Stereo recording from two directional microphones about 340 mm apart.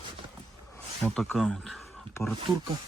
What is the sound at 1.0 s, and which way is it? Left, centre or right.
Speech, centre.